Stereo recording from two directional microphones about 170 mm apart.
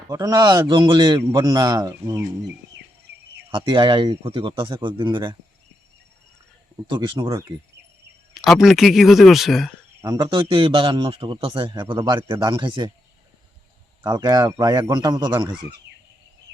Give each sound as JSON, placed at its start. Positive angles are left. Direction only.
{"t": 0.1, "sound": "speech", "side_deg": -20}
{"t": 2.8, "sound": "cricket", "side_deg": -90}
{"t": 3.5, "sound": "speech", "side_deg": -30}
{"t": 6.9, "sound": "speech", "side_deg": -30}
{"t": 8.3, "sound": "speech", "side_deg": 0}
{"t": 10.0, "sound": "speech", "side_deg": -20}
{"t": 10.2, "sound": "a man's voice", "side_deg": -30}
{"t": 14.0, "sound": "speech", "side_deg": -25}